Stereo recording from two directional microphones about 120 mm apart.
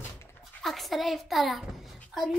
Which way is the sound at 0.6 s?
Centre (ahead or behind).